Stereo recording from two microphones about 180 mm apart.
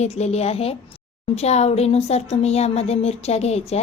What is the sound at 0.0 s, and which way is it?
A woman's voice, 35° left (ahead or behind).